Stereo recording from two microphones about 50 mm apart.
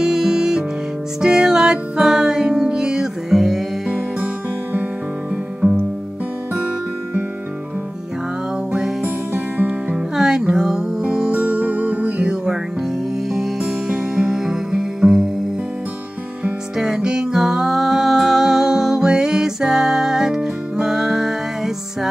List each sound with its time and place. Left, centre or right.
0.0 s music: centre
5.6 s music: centre
9.9 s music: centre
11.3 s music: right
12.4 s music: centre
16.7 s music: centre